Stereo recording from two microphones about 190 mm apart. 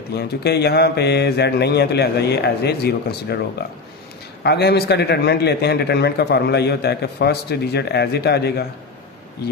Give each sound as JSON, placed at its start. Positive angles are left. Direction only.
{"t": 0.1, "sound": "a man's voice", "side_deg": 60}